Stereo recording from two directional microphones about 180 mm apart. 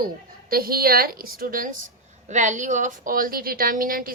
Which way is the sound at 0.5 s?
55° right (ahead or behind).